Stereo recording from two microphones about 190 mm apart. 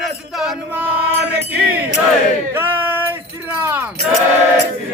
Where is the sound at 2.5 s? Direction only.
10° right (ahead or behind).